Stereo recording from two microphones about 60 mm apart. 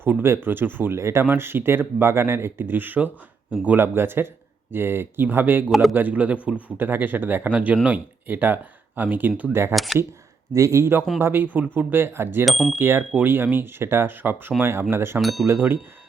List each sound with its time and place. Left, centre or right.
0.2 s speech: right
0.9 s speech: right
1.2 s speech: right
9.7 s speech: centre
10.5 s speech: right
11.2 s speech: right
12.5 s speech: centre
12.8 s speech: right